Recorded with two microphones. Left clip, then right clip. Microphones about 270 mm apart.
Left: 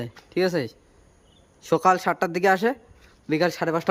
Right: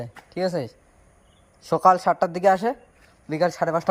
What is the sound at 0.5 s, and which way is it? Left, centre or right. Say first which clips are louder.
Speech: left 1 dB; centre.